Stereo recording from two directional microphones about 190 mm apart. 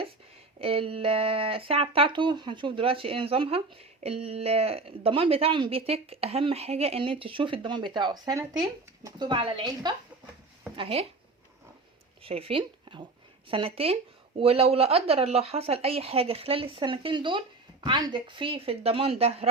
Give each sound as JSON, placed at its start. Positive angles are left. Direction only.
{"t": 0.6, "sound": "speech", "side_deg": -30}
{"t": 12.2, "sound": "speech", "side_deg": -30}